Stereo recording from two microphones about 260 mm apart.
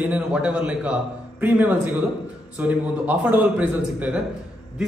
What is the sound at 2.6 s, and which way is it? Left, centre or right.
A man's voice, centre.